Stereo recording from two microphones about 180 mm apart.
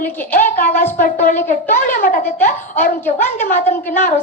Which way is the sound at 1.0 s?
50° left (ahead or behind).